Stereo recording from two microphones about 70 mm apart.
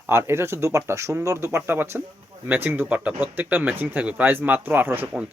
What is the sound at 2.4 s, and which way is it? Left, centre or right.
Speech, right.